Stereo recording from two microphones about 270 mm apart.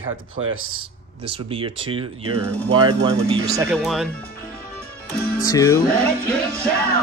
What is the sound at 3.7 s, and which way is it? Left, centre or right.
Music, centre.